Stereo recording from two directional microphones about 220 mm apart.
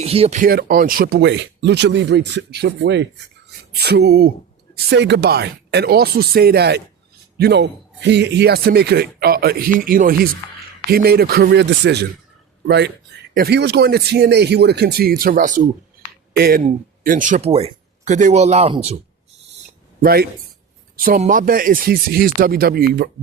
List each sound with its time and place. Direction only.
0.0 s speech: 25° right (ahead or behind)
20.0 s speech: 45° right (ahead or behind)